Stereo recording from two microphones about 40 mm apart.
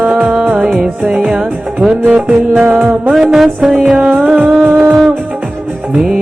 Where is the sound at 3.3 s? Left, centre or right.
Centre.